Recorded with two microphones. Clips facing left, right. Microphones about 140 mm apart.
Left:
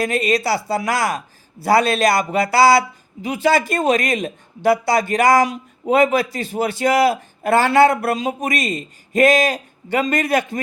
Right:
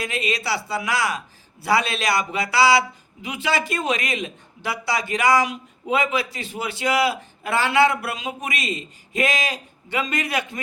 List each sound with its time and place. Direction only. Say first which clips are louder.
0.0 s speech: left 8 dB; 45° left (ahead or behind)